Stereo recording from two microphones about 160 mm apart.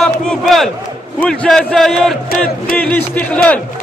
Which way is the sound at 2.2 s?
65° left (ahead or behind).